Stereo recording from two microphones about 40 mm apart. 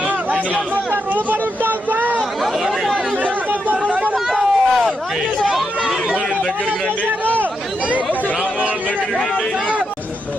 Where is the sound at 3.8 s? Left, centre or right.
Right.